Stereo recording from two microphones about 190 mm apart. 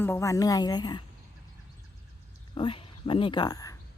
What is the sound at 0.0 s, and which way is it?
A woman's voice, 15° left (ahead or behind).